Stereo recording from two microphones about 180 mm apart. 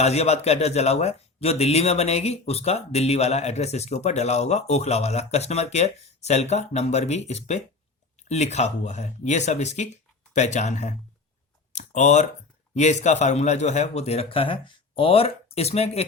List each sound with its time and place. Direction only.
0.0 s a man's voice: 35° left (ahead or behind)
11.7 s a sound: 40° left (ahead or behind)
12.7 s a man's voice: 40° left (ahead or behind)